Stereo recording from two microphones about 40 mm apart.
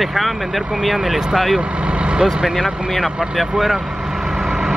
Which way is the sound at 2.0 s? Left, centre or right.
Right.